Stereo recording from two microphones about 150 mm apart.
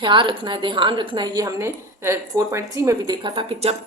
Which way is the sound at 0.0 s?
30° right (ahead or behind).